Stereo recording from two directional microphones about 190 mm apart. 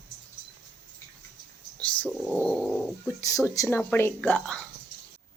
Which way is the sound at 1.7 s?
5° left (ahead or behind).